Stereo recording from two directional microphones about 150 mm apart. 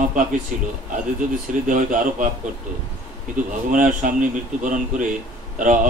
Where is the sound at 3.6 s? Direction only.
60° right (ahead or behind).